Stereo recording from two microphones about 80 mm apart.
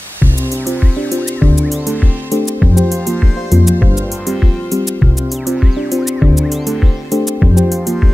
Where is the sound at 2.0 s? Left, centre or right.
Right.